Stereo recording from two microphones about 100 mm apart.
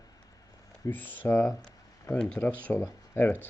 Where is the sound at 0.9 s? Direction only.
20° left (ahead or behind).